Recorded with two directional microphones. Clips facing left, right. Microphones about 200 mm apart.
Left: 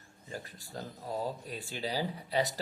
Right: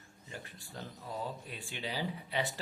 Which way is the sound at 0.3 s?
40° left (ahead or behind).